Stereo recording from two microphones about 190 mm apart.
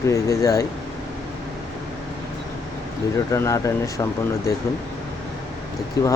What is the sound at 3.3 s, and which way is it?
Speech, 15° left (ahead or behind).